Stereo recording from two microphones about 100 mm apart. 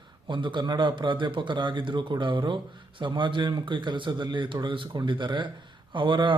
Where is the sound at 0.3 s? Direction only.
50° right (ahead or behind).